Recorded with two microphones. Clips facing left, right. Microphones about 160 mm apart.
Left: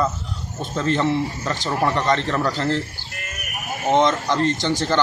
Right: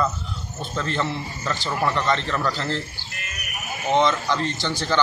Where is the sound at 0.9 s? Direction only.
15° left (ahead or behind).